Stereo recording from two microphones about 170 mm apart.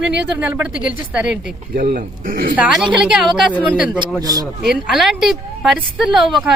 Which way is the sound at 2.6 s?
Centre (ahead or behind).